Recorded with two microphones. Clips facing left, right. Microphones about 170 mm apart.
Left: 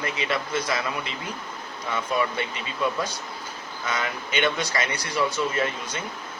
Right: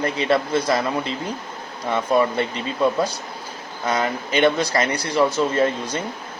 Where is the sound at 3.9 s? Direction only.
35° right (ahead or behind).